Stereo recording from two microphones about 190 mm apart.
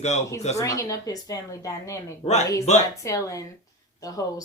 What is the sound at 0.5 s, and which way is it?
Speech, 15° left (ahead or behind).